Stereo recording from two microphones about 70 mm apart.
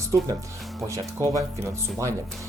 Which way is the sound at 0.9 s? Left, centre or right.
Right.